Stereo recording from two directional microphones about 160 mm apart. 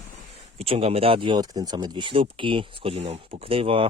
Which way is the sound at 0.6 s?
35° right (ahead or behind).